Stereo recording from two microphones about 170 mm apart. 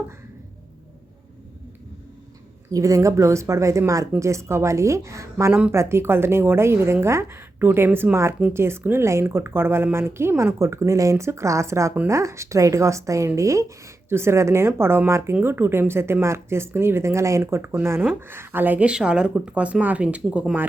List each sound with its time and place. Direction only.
2.7 s a woman's voice: 20° right (ahead or behind)